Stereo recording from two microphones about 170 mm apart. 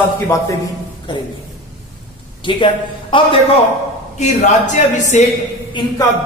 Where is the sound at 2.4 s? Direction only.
30° left (ahead or behind).